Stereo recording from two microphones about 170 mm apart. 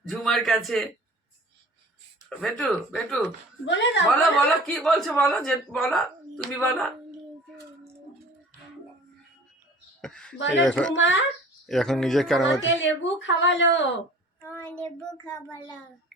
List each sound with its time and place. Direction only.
0.1 s a man's voice: centre (ahead or behind)
2.4 s a man's voice: 5° left (ahead or behind)
3.7 s speech: 90° left
4.4 s a man's voice: 5° left (ahead or behind)
10.0 s a man's voice: 5° left (ahead or behind)
10.3 s speech: 90° left
10.6 s a man's voice: 5° left (ahead or behind)
10.9 s speech: 90° left
11.6 s a man's voice: centre (ahead or behind)
12.6 s speech: 90° left
14.4 s child singing: 10° left (ahead or behind)
14.8 s child singing: 20° left (ahead or behind)